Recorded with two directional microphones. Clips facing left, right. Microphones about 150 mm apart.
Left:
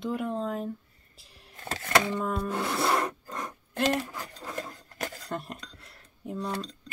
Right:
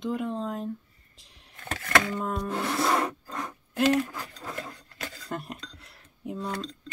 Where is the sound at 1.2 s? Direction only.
5° left (ahead or behind).